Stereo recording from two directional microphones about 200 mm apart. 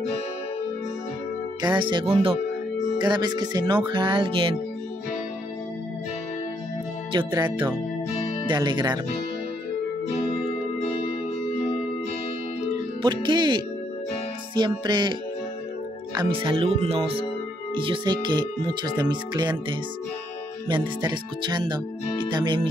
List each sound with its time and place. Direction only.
1.6 s speech: 20° right (ahead or behind)
7.1 s speech: 25° right (ahead or behind)
8.5 s speech: 20° right (ahead or behind)
13.0 s speech: 20° right (ahead or behind)
16.2 s speech: 25° right (ahead or behind)
20.6 s speech: 25° right (ahead or behind)